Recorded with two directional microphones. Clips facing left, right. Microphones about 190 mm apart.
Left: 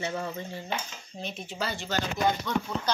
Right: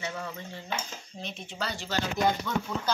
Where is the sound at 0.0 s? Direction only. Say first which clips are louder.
Left 4 dB; 30° left (ahead or behind).